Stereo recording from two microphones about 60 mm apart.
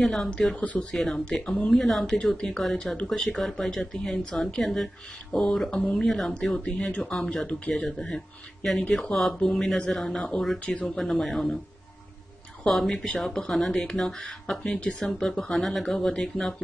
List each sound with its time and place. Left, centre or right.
0.0 s speech: centre
0.3 s a woman's voice: centre
0.9 s a woman's voice: centre
3.1 s a woman's voice: centre
7.4 s speech: left
8.9 s a woman's voice: centre
11.0 s speech: centre
12.6 s a woman's voice: centre
14.8 s speech: centre
15.2 s speech: centre